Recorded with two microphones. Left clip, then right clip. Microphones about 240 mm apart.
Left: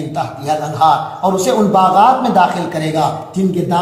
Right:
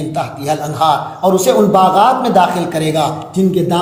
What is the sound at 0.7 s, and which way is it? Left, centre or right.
A man's voice, right.